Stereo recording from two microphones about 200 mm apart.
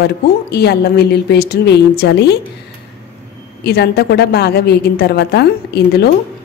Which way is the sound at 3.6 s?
55° left (ahead or behind).